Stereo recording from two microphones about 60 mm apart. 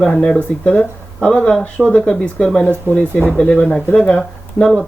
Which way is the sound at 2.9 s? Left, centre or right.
Right.